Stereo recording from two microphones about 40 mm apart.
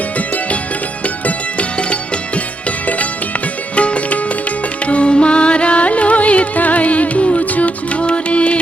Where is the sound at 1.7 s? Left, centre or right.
Left.